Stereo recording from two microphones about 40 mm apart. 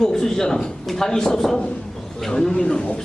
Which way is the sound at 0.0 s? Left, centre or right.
Centre.